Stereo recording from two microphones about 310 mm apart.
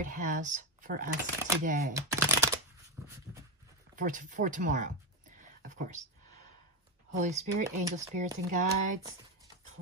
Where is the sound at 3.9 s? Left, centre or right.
Right.